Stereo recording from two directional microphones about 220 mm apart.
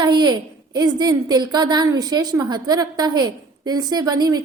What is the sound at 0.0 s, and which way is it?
A woman's voice, 20° right (ahead or behind).